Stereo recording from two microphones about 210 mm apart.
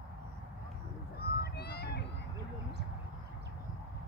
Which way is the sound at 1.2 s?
50° left (ahead or behind).